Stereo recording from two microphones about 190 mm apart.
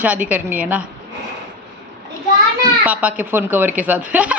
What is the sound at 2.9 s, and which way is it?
A woman's voice, 10° right (ahead or behind).